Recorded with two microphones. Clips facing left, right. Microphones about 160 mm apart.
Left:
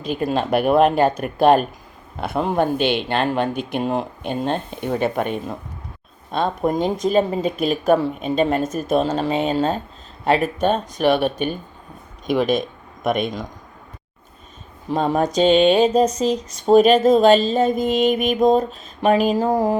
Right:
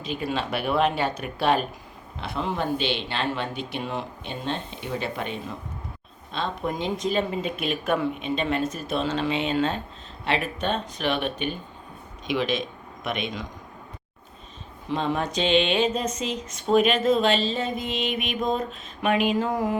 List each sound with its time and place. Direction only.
0.0 s speech: 45° left (ahead or behind)
14.8 s speech: 45° left (ahead or behind)